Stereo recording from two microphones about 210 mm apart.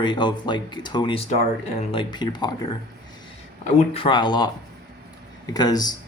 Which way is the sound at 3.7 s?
25° left (ahead or behind).